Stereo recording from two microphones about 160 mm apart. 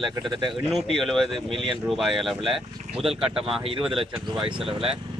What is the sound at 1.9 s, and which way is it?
Speech, centre (ahead or behind).